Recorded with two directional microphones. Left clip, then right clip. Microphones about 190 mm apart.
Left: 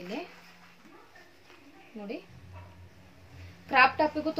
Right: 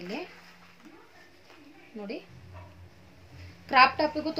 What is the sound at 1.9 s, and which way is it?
Speech, 15° right (ahead or behind).